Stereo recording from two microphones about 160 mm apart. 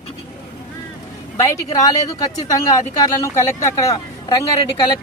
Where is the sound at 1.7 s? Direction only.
25° left (ahead or behind).